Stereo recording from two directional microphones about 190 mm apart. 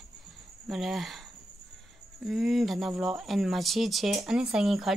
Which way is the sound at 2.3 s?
Centre (ahead or behind).